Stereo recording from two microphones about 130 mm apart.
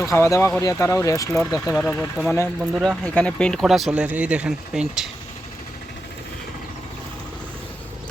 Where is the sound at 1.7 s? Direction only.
15° left (ahead or behind).